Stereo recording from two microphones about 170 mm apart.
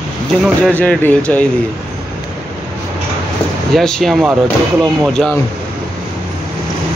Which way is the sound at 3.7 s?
Centre (ahead or behind).